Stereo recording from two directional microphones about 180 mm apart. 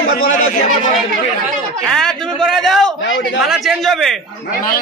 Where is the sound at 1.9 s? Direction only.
Centre (ahead or behind).